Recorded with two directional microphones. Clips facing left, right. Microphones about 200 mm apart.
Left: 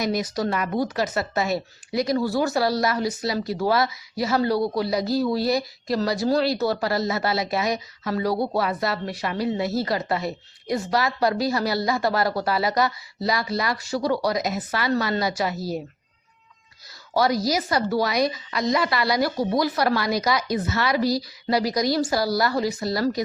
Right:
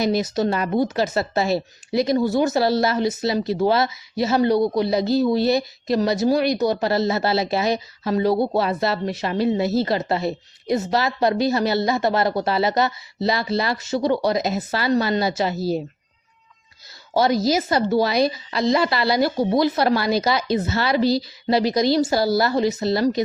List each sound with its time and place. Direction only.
0.0 s a woman's voice: 25° right (ahead or behind)
17.2 s a woman's voice: 25° right (ahead or behind)